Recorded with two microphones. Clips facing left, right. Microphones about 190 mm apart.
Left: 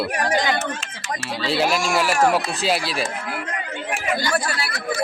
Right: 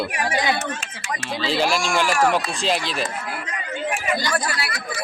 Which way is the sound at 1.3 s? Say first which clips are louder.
Even; 5° left (ahead or behind).